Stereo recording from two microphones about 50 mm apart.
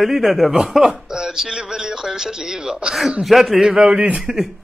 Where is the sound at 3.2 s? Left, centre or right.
Centre.